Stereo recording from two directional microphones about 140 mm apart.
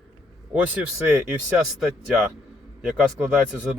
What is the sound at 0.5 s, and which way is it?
Speech, 10° right (ahead or behind).